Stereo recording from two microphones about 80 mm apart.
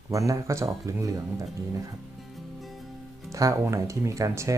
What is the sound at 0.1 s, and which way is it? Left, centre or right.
Speech, right.